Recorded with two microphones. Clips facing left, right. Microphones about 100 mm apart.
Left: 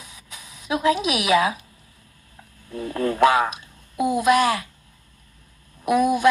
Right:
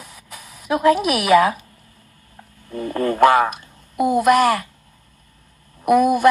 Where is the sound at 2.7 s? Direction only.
60° right (ahead or behind).